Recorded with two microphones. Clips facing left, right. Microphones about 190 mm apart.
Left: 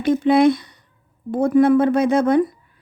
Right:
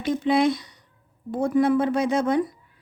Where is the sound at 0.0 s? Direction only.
55° left (ahead or behind).